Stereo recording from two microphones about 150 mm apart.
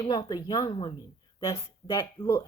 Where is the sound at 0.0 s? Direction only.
25° left (ahead or behind).